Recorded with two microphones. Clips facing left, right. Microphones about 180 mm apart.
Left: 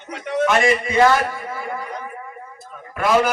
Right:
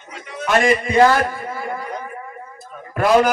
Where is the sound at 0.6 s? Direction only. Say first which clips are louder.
Right 5 dB; 35° right (ahead or behind).